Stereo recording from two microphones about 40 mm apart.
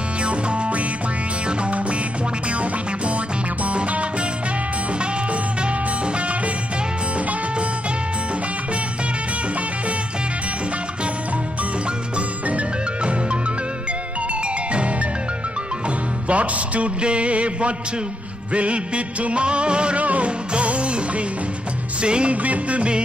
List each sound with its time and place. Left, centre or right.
0.2 s music: right
3.6 s music: right
12.4 s music: right
16.3 s music: right
22.0 s music: right